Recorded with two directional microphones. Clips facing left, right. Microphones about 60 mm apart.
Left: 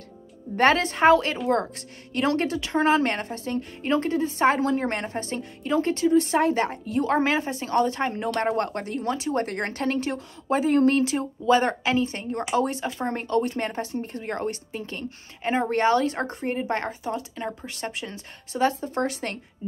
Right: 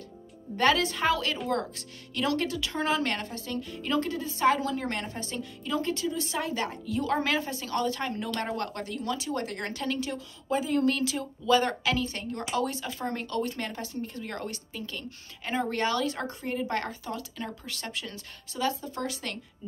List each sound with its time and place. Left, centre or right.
0.6 s speech: left